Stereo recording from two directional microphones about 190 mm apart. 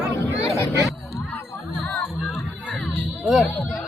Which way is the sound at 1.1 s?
15° left (ahead or behind).